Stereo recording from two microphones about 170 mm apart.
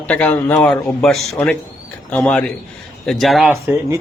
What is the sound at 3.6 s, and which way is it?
Speech, 15° right (ahead or behind).